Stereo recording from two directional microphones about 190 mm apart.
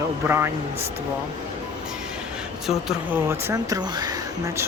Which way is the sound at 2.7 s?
Centre (ahead or behind).